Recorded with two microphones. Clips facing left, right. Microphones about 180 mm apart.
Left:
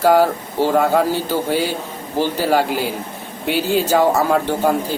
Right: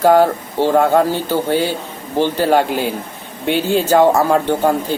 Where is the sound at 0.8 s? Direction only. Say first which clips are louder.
Right 2 dB; 10° left (ahead or behind).